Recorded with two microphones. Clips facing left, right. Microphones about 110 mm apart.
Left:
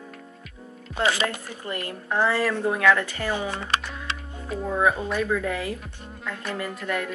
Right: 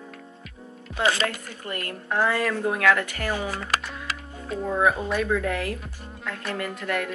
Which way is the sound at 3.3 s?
25° left (ahead or behind).